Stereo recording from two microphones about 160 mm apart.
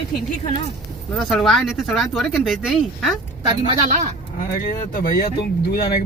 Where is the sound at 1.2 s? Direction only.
Centre (ahead or behind).